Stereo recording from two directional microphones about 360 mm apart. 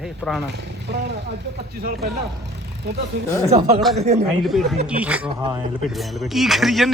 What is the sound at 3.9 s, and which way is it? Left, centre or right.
Speech, centre.